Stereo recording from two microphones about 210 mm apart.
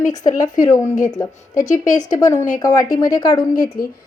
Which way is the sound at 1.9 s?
15° left (ahead or behind).